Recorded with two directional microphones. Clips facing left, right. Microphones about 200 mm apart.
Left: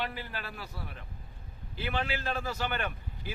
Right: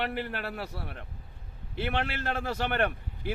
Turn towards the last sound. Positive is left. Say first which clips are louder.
# right 8 dB
turn(degrees=-60)  # may be behind; listen again after turning